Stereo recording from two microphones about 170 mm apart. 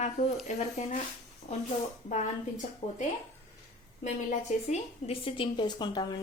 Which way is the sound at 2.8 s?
45° left (ahead or behind).